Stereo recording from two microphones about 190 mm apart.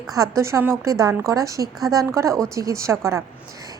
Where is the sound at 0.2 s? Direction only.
15° right (ahead or behind).